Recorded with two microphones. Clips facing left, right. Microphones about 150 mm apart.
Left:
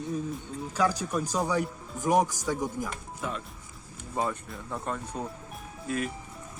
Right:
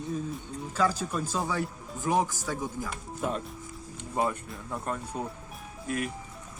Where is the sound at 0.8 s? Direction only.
15° left (ahead or behind).